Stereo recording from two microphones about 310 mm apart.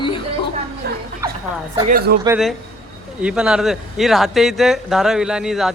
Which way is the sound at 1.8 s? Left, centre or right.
Right.